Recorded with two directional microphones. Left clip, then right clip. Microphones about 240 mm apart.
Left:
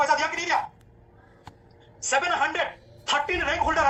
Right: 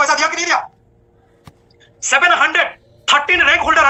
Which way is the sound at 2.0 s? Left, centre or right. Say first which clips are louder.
Right 11 dB; centre.